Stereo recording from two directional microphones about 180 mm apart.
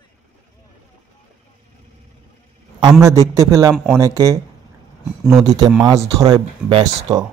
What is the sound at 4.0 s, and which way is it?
Speech, 20° right (ahead or behind).